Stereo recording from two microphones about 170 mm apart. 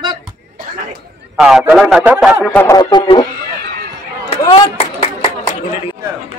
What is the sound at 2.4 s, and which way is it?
Speech, 15° left (ahead or behind).